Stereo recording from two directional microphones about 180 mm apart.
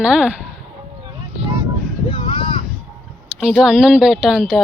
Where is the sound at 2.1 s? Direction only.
30° left (ahead or behind).